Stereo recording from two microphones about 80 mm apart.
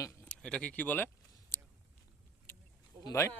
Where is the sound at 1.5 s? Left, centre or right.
Left.